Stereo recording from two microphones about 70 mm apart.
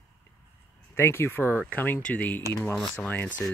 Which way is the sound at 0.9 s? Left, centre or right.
Left.